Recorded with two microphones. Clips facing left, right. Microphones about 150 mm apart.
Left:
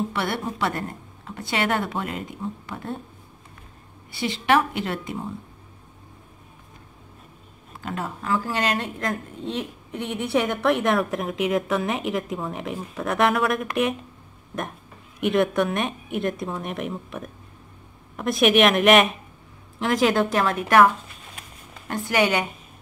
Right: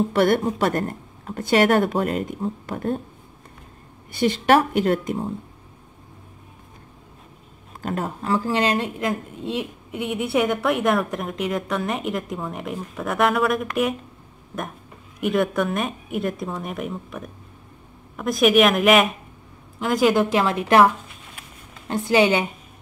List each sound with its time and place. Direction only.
0.1 s a woman's voice: 45° right (ahead or behind)
4.2 s a woman's voice: 45° right (ahead or behind)
7.8 s speech: 35° right (ahead or behind)
8.6 s a woman's voice: 15° right (ahead or behind)
15.2 s a woman's voice: centre (ahead or behind)
20.2 s a woman's voice: 15° right (ahead or behind)